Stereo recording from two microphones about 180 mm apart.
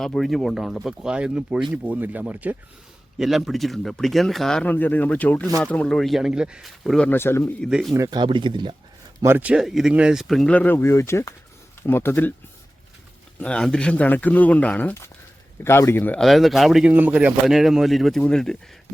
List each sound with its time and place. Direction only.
0.0 s speech: centre (ahead or behind)
7.7 s speech: centre (ahead or behind)
7.9 s speech: 20° right (ahead or behind)
9.2 s speech: 10° right (ahead or behind); by 12.3 s 10° left (ahead or behind)
13.4 s speech: 5° left (ahead or behind)